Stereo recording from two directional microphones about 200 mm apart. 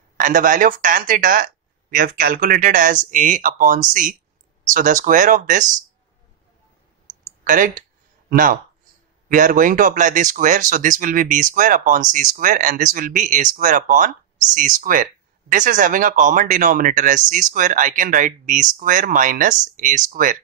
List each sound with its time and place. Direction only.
0.2 s speech: 40° right (ahead or behind)
7.4 s speech: 40° right (ahead or behind)